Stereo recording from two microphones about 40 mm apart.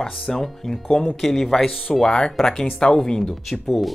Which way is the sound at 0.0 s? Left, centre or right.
Centre.